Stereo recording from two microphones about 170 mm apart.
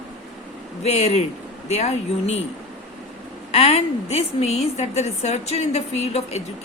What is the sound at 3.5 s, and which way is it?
A woman's voice, 35° left (ahead or behind).